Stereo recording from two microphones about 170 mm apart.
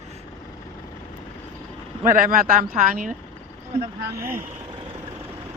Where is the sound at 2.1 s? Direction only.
55° right (ahead or behind).